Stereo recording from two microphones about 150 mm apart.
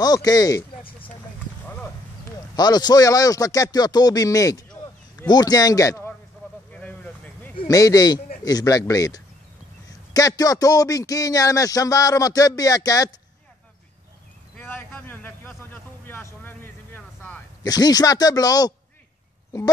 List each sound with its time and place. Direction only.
0.0 s a man's voice: 25° left (ahead or behind)
2.5 s a man's voice: 25° left (ahead or behind)
6.7 s vehicle: 10° left (ahead or behind)
7.6 s a man's voice: 25° left (ahead or behind)
14.6 s a sound: 15° left (ahead or behind)
17.6 s a man's voice: 25° left (ahead or behind)